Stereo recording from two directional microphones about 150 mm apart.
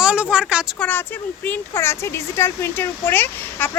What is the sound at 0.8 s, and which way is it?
Speech, 10° left (ahead or behind).